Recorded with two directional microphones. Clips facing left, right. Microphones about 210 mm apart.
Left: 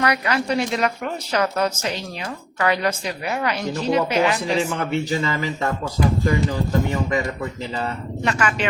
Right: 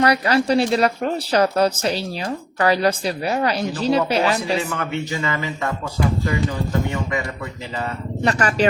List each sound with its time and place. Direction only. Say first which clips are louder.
0.0 s a woman's voice: right 4 dB; 35° right (ahead or behind)
5.1 s speech: left 2 dB; 35° left (ahead or behind)
8.2 s a woman's voice: right 3 dB; 35° right (ahead or behind)